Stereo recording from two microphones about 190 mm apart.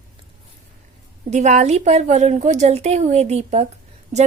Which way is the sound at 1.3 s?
40° right (ahead or behind).